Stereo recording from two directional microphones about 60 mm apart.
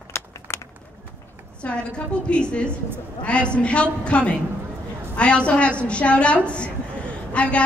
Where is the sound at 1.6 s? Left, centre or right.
Left.